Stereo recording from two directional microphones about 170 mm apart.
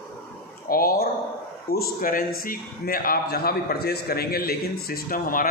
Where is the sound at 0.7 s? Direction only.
60° left (ahead or behind).